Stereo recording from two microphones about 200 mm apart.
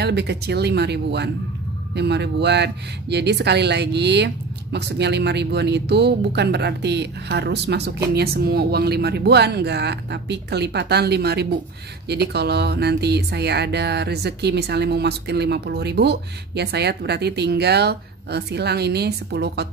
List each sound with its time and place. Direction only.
0.0 s speech: 55° right (ahead or behind)